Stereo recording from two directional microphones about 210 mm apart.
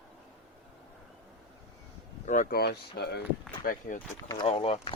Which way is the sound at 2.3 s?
40° left (ahead or behind).